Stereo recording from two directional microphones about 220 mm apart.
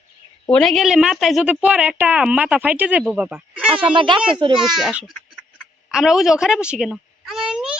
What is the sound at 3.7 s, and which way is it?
Speech, 25° right (ahead or behind).